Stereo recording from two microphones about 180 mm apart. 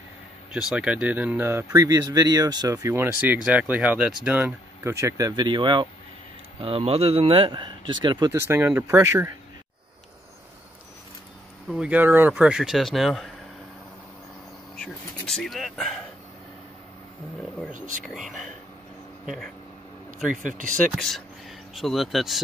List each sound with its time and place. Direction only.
0.5 s speech: 5° right (ahead or behind)
11.7 s speech: 5° right (ahead or behind)
14.8 s speech: 5° left (ahead or behind)
17.7 s speech: 45° right (ahead or behind)
19.2 s speech: centre (ahead or behind)
20.4 s speech: 45° right (ahead or behind)
20.9 s speech: centre (ahead or behind)